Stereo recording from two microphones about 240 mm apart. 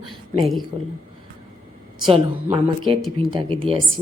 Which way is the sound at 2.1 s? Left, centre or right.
Centre.